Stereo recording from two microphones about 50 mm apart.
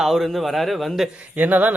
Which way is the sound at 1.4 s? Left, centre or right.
Right.